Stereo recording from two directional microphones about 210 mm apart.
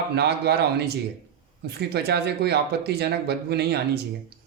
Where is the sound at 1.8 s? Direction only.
50° right (ahead or behind).